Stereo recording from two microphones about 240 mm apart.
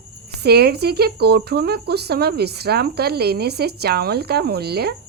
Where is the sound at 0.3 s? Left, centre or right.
Right.